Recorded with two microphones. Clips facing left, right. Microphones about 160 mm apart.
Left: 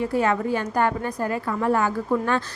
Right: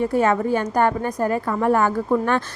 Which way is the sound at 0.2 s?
45° right (ahead or behind).